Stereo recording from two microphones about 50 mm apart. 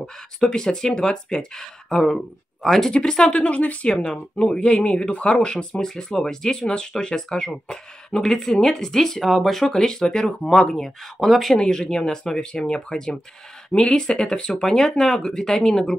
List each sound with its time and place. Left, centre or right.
0.0 s speech: centre
11.5 s speech: centre